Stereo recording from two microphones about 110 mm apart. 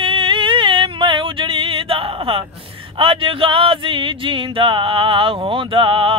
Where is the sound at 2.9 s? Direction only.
55° right (ahead or behind).